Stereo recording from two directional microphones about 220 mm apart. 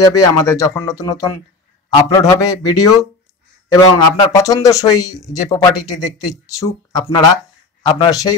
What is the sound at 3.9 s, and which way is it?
Speech, 15° left (ahead or behind).